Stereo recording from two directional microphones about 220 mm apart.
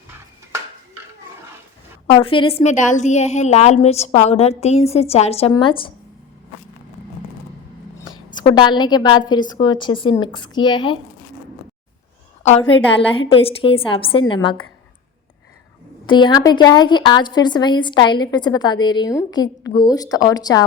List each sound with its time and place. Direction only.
2.1 s a woman's voice: 25° left (ahead or behind)
8.0 s a woman's voice: 20° left (ahead or behind)
12.4 s a woman's voice: 30° left (ahead or behind)
16.0 s a woman's voice: 20° left (ahead or behind)